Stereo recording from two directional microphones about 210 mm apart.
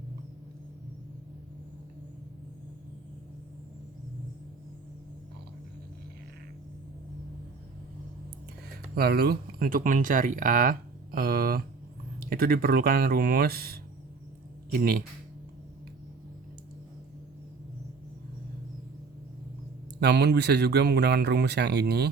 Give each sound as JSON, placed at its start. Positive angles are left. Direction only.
{"t": 9.0, "sound": "speech", "side_deg": -50}
{"t": 20.0, "sound": "speech", "side_deg": -55}